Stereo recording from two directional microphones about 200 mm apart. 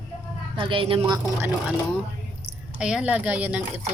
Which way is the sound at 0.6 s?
25° right (ahead or behind).